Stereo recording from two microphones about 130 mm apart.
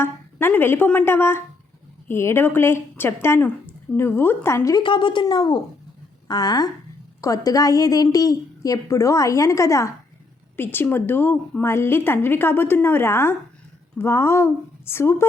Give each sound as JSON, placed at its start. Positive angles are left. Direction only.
{"t": 0.0, "sound": "a woman's voice", "side_deg": 15}
{"t": 4.8, "sound": "a woman's voice", "side_deg": 40}